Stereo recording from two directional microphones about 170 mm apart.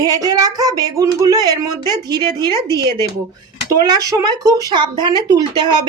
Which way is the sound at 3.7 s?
20° right (ahead or behind).